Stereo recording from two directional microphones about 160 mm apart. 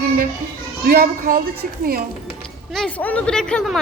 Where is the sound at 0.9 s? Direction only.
65° right (ahead or behind).